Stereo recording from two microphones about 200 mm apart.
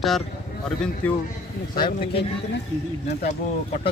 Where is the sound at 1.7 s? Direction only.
25° left (ahead or behind).